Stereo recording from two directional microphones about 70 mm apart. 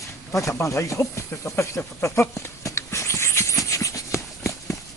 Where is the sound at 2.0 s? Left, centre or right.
Left.